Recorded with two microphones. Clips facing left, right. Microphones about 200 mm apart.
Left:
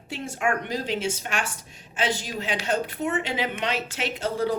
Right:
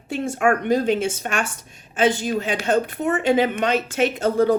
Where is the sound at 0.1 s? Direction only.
50° right (ahead or behind).